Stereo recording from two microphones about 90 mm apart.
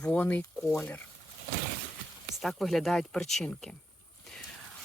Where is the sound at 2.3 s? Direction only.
Centre (ahead or behind).